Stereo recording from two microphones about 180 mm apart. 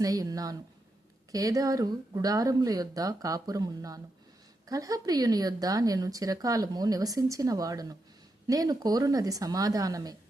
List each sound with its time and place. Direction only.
0.0 s speech: 20° right (ahead or behind)